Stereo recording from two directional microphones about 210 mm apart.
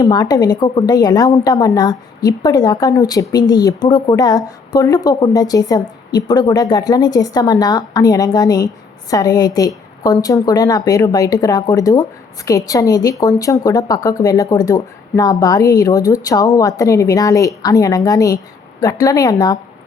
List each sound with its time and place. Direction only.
0.0 s a woman's voice: 20° left (ahead or behind)